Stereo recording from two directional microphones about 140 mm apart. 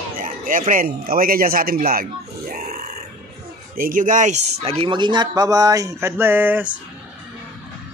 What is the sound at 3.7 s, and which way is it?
Speech, 80° right.